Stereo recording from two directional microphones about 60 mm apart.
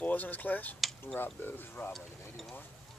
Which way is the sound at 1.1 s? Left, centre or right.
Left.